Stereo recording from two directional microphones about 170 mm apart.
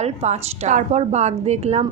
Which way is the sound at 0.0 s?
40° right (ahead or behind).